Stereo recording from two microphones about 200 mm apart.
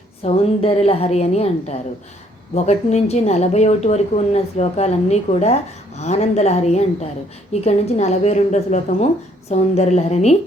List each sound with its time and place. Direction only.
0.3 s speech: 30° left (ahead or behind)